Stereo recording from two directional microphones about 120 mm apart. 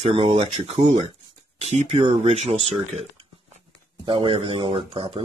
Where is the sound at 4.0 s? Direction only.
45° right (ahead or behind).